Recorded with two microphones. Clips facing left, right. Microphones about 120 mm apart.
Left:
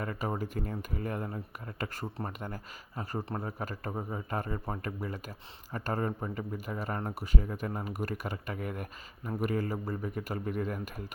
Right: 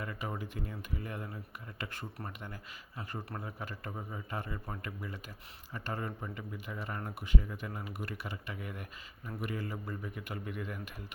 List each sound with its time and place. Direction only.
0.0 s speech: 40° left (ahead or behind)